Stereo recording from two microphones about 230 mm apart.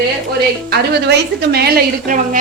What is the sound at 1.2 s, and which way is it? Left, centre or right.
A woman's voice, right.